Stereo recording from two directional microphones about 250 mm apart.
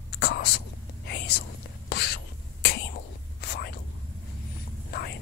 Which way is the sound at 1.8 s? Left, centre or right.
Left.